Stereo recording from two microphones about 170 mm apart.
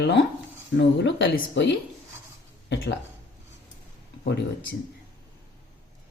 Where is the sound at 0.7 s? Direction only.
90° left.